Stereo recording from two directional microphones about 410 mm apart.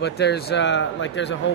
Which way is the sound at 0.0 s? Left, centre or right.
Left.